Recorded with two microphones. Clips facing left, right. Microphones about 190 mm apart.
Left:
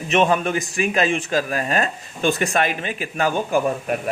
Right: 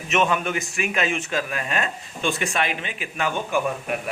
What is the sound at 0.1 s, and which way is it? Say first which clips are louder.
A man's voice: left 4 dB; 35° left (ahead or behind).